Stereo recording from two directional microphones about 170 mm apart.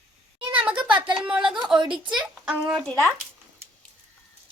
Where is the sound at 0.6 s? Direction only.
5° right (ahead or behind).